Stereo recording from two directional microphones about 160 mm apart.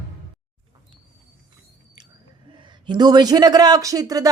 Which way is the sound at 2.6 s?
25° right (ahead or behind).